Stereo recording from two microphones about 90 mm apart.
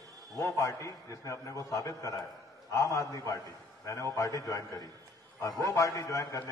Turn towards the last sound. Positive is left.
turn(degrees=35)  # may be behind; listen again after turning